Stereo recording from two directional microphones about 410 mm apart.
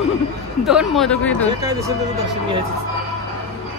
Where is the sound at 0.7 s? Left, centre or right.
Centre.